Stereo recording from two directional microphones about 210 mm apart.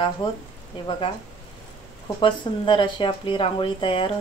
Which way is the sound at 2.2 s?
20° left (ahead or behind).